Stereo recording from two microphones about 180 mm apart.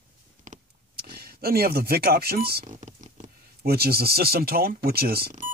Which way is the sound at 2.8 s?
45° right (ahead or behind).